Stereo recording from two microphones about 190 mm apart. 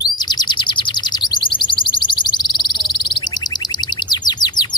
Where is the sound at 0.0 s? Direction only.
20° left (ahead or behind).